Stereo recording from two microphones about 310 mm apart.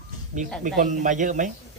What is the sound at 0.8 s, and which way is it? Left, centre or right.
Speech, right.